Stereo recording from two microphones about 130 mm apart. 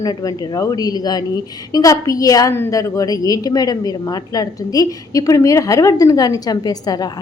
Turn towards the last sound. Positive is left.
turn(degrees=30)  # may be behind; listen again after turning